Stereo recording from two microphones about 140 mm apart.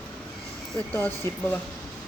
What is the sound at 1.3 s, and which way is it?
Speech, 20° left (ahead or behind).